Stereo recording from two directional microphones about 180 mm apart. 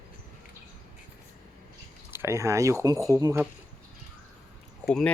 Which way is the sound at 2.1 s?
15° right (ahead or behind).